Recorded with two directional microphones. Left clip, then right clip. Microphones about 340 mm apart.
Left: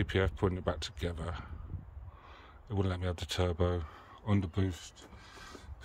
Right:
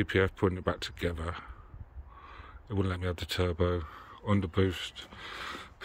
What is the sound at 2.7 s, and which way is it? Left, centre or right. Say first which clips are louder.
Speech: right 3 dB; centre.